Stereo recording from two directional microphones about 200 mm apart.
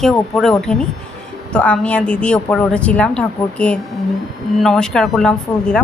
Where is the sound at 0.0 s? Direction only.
Centre (ahead or behind).